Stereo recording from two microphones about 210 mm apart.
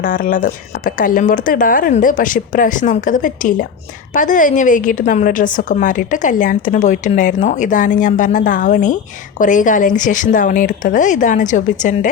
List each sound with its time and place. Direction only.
0.0 s a woman's voice: 40° left (ahead or behind)